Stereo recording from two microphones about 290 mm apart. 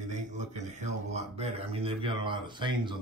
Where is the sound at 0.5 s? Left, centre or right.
Right.